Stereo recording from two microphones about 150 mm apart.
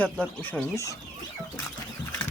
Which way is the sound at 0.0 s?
10° left (ahead or behind).